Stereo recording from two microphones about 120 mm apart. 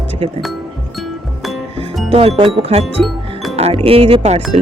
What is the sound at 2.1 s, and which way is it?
Speech, 50° right (ahead or behind).